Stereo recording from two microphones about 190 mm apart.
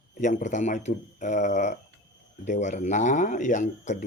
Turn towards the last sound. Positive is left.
turn(degrees=40)  # may be behind; listen again after turning